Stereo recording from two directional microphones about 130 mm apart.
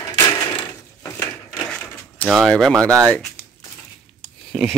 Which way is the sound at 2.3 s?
5° left (ahead or behind).